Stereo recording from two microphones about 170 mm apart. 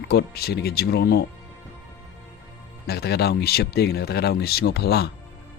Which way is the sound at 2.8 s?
70° left (ahead or behind).